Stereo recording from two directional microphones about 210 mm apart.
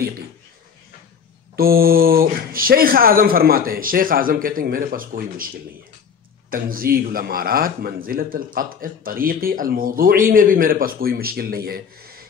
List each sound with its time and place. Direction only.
1.6 s a man's voice: 45° right (ahead or behind)
6.5 s a man's voice: 45° right (ahead or behind)